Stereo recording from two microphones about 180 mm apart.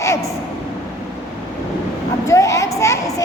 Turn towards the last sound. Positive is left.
turn(degrees=15)  # may be behind; listen again after turning